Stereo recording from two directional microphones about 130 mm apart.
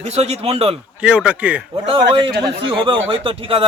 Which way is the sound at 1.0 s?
10° right (ahead or behind).